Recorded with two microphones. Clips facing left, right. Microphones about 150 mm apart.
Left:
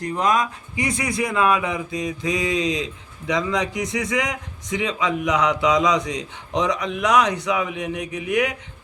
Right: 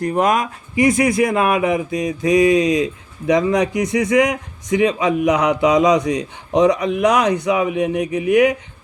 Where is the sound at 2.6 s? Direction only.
25° left (ahead or behind).